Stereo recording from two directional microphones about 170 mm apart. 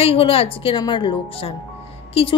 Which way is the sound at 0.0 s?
35° left (ahead or behind).